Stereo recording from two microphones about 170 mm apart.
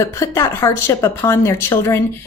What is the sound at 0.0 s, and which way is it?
A woman's voice, 15° left (ahead or behind).